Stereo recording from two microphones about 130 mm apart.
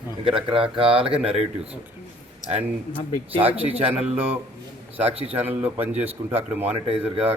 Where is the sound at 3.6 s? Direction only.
50° right (ahead or behind).